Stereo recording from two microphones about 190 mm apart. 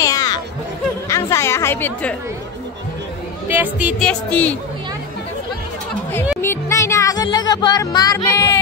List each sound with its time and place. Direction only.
0.0 s chatter: 20° left (ahead or behind)
3.4 s speech: 10° right (ahead or behind)
4.0 s speech: 5° left (ahead or behind)
6.4 s music: 15° left (ahead or behind)